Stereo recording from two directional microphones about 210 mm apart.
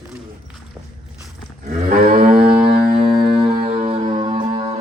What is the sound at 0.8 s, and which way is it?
Speech, 5° right (ahead or behind).